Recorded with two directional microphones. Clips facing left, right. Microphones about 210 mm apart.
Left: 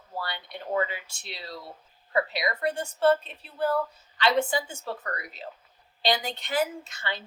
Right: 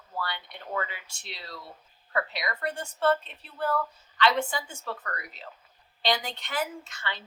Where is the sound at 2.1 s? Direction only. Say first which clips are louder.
Left 4 dB; 25° left (ahead or behind).